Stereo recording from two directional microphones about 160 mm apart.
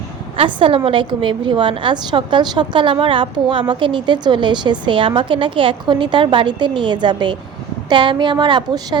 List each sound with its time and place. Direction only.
0.3 s a woman's voice: 35° right (ahead or behind)